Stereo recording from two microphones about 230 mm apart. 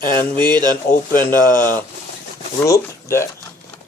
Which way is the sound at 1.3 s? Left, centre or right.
Centre.